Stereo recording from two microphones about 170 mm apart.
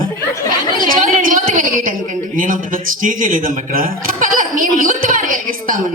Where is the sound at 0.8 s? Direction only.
55° right (ahead or behind).